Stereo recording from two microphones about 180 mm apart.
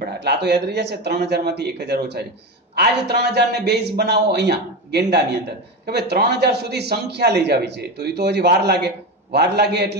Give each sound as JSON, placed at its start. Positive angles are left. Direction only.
{"t": 0.2, "sound": "a man's voice", "side_deg": -70}